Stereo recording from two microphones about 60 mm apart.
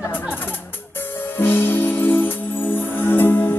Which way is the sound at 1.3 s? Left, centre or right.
Left.